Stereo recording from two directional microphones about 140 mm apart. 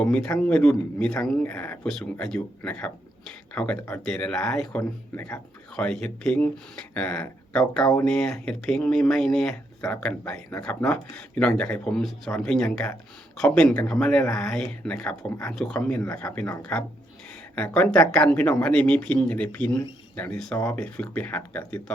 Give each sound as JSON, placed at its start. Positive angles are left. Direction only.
{"t": 0.0, "sound": "speech", "side_deg": 10}